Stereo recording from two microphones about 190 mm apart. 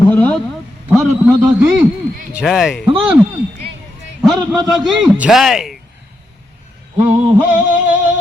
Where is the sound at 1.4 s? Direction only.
10° right (ahead or behind).